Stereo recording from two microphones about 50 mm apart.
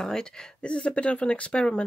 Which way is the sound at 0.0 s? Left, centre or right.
Centre.